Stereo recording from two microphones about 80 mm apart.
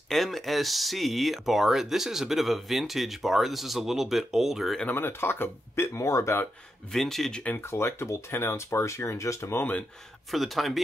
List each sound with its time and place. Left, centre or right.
0.1 s speech: centre
4.8 s speech: left
6.9 s speech: centre
7.5 s speech: left
10.3 s speech: centre